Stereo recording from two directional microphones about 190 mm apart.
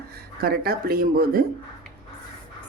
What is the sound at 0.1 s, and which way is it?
Speech, 55° right (ahead or behind).